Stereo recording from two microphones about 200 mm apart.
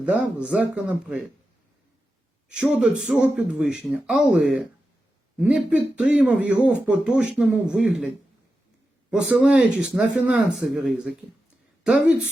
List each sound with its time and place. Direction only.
0.0 s speech: 5° right (ahead or behind)
2.5 s speech: 5° right (ahead or behind)